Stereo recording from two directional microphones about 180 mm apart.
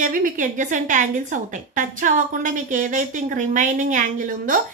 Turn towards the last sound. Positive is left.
turn(degrees=-45)  # may be behind; listen again after turning